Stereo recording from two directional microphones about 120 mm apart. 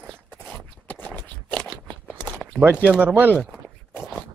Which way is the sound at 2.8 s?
15° right (ahead or behind).